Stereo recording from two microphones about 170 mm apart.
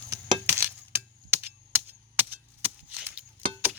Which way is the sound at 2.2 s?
10° right (ahead or behind).